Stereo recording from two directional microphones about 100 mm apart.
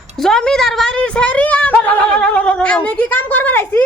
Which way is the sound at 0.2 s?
5° left (ahead or behind).